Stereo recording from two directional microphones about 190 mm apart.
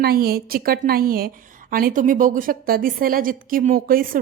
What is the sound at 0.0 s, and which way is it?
A woman's voice, 55° right (ahead or behind).